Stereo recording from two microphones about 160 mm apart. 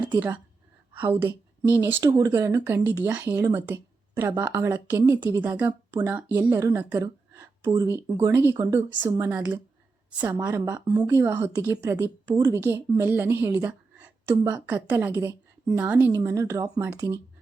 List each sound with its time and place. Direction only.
1.7 s a woman's voice: 15° right (ahead or behind)
9.3 s a woman's voice: 10° right (ahead or behind)